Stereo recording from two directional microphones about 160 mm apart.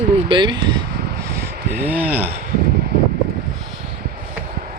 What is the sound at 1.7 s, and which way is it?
Speech, 10° right (ahead or behind).